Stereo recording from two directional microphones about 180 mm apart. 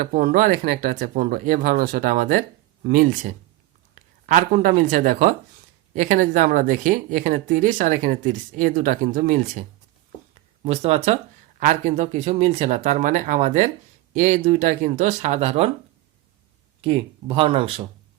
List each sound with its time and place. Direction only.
0.0 s speech: 50° right (ahead or behind)
10.6 s speech: 35° right (ahead or behind)
16.8 s speech: 30° right (ahead or behind)